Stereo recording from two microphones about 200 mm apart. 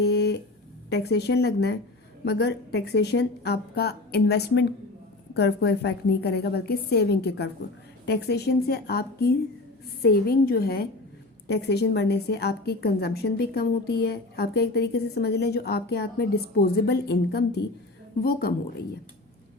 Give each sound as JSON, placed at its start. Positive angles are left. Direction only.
{"t": 0.0, "sound": "music", "side_deg": 55}
{"t": 0.9, "sound": "a woman's voice", "side_deg": 55}